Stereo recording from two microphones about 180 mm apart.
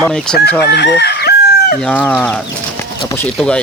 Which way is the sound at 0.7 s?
65° left (ahead or behind).